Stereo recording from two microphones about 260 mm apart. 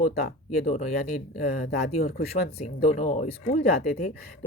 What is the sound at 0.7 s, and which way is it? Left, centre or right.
Speech, left.